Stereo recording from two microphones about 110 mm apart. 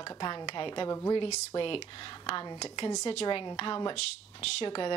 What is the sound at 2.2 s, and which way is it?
A woman's voice, 45° left (ahead or behind).